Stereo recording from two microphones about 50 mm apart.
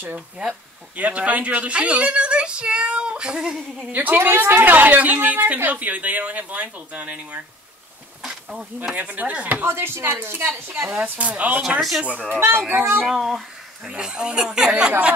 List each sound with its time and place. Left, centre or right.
0.9 s speech: right
3.9 s a woman's voice: right
8.2 s insect: centre
8.9 s a woman's voice: right
9.6 s speech: right
11.0 s speech: right
12.3 s speech: right
13.0 s speech: centre